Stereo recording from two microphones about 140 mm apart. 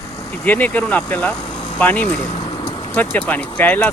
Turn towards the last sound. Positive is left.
turn(degrees=10)  # may be behind; listen again after turning